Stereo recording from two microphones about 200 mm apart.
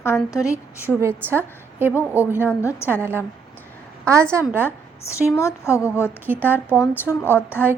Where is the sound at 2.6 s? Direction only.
10° left (ahead or behind).